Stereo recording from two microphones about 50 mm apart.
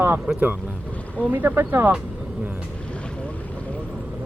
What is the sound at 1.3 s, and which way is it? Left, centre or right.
Speech, right.